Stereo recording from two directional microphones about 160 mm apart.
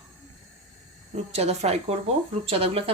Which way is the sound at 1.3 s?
40° right (ahead or behind).